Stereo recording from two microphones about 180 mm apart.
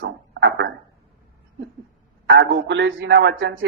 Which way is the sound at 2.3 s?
90° right.